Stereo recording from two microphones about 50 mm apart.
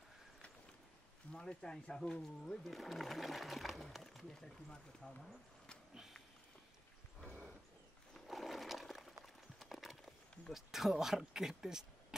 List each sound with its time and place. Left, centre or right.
1.3 s speech: centre
2.6 s speech: centre
4.3 s speech: centre
8.3 s water: centre
9.2 s clip-clop: centre
10.5 s speech: centre